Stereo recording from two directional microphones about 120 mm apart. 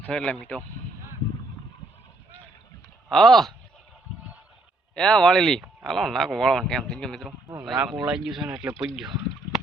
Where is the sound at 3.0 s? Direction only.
Centre (ahead or behind).